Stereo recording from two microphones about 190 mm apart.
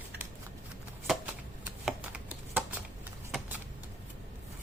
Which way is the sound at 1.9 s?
5° right (ahead or behind).